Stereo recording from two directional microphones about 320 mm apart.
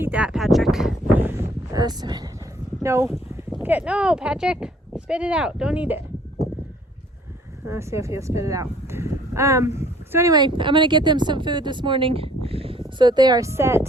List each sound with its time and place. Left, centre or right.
0.0 s a sound: centre
2.8 s speech: centre
7.6 s speech: centre